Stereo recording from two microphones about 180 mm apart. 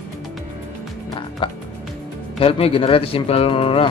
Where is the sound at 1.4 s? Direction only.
25° left (ahead or behind).